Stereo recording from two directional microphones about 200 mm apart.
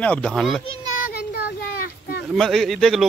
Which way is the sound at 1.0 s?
50° left (ahead or behind).